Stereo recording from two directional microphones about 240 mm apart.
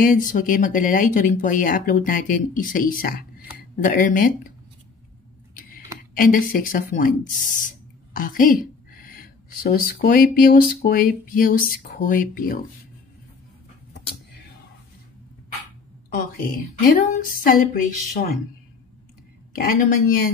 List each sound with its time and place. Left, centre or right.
0.0 s speech: left
6.1 s speech: left
16.8 s speech: left
19.5 s speech: left